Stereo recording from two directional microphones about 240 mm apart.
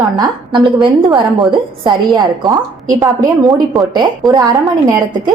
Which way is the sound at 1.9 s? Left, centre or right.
Centre.